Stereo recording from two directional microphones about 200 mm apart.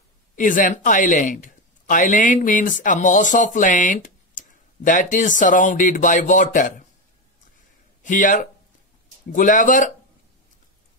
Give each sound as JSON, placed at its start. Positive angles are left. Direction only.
{"t": 0.4, "sound": "speech", "side_deg": 40}
{"t": 8.0, "sound": "speech", "side_deg": 40}